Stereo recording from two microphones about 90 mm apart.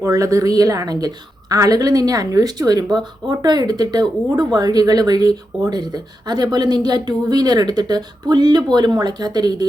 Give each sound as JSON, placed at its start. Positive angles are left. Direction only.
{"t": 0.0, "sound": "a woman's voice", "side_deg": -40}